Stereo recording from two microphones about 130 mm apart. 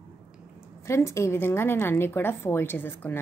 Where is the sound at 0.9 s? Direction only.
20° left (ahead or behind).